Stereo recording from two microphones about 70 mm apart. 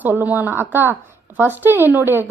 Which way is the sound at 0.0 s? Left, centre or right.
Right.